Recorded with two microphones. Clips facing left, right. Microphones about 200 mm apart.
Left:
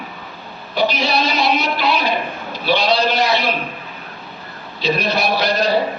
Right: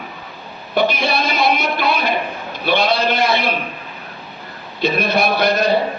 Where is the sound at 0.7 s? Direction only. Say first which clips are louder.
Right 1 dB; 55° right (ahead or behind).